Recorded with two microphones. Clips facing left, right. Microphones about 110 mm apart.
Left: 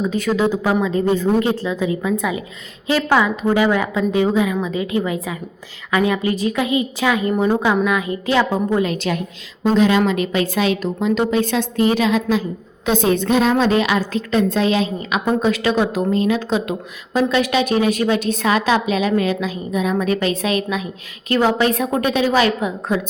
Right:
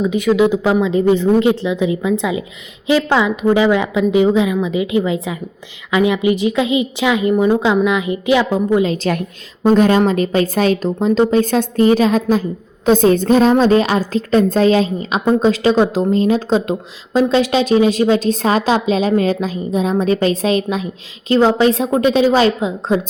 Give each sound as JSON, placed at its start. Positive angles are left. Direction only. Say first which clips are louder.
{"t": 0.1, "sound": "a woman's voice", "louder": "right 5 dB", "side_deg": -15}
{"t": 9.7, "sound": "a woman's voice", "louder": "right 2 dB", "side_deg": -50}